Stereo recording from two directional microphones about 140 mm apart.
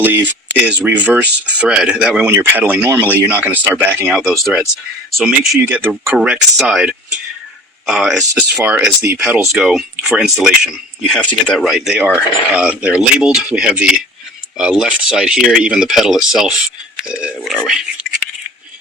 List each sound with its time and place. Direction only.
0.0 s speech: 10° right (ahead or behind)
4.1 s speech: centre (ahead or behind)
5.6 s speech: 10° right (ahead or behind)
8.4 s speech: 10° right (ahead or behind)